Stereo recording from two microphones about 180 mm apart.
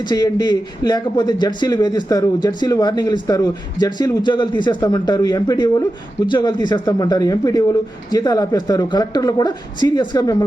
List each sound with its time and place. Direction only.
0.0 s speech: 25° left (ahead or behind)